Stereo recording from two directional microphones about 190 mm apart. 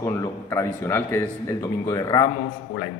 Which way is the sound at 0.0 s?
15° left (ahead or behind).